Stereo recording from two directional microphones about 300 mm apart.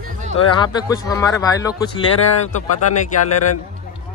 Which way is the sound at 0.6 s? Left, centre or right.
Centre.